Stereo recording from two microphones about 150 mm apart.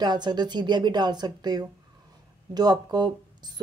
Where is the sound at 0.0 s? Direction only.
30° right (ahead or behind).